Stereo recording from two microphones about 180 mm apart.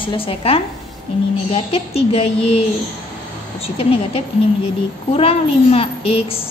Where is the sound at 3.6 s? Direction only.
35° left (ahead or behind).